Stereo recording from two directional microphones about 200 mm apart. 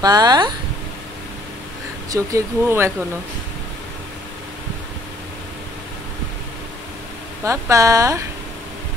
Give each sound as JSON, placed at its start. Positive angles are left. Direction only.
{"t": 0.0, "sound": "speech", "side_deg": -20}
{"t": 2.0, "sound": "speech", "side_deg": -15}
{"t": 7.4, "sound": "speech", "side_deg": -15}